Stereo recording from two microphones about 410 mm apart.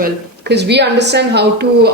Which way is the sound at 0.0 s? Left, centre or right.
Right.